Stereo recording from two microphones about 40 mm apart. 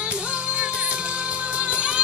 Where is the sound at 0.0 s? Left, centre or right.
Right.